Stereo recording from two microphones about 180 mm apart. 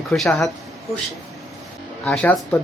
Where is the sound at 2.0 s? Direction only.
10° left (ahead or behind).